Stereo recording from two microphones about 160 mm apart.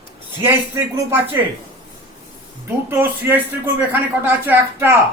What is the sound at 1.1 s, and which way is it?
Speech, 15° right (ahead or behind).